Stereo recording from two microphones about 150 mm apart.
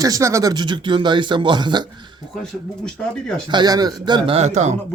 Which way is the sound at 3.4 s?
30° right (ahead or behind).